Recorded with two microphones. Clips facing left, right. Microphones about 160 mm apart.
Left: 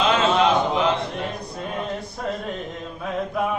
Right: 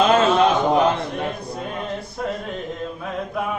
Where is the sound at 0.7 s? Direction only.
45° right (ahead or behind).